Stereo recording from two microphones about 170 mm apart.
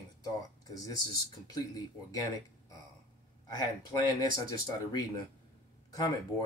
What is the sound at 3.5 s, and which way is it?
Speech, 20° left (ahead or behind).